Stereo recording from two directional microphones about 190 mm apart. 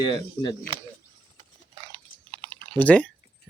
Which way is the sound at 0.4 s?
20° left (ahead or behind).